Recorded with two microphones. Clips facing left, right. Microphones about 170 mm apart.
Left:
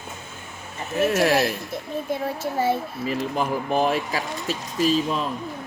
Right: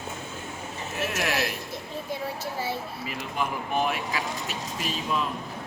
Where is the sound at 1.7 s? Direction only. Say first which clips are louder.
Left 5 dB; 55° left (ahead or behind).